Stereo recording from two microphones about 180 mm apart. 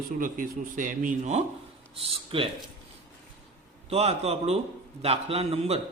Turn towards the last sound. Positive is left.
turn(degrees=-35)  # may be behind; listen again after turning